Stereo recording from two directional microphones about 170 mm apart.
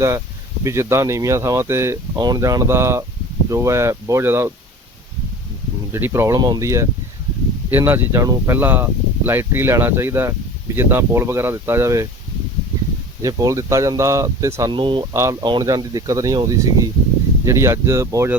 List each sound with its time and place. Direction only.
0.6 s speech: 15° right (ahead or behind)
5.9 s speech: 15° right (ahead or behind)
13.2 s speech: 20° right (ahead or behind)
15.1 s speech: 20° right (ahead or behind)